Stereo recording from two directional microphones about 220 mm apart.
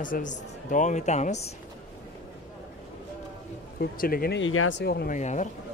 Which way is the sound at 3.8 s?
40° left (ahead or behind).